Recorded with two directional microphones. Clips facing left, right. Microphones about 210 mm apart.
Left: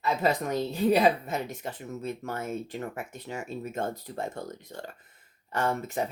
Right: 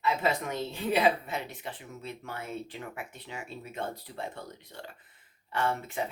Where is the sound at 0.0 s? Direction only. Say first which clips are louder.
Left 2 dB; 40° left (ahead or behind).